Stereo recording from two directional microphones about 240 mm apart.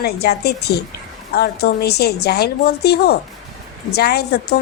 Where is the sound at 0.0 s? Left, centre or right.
Left.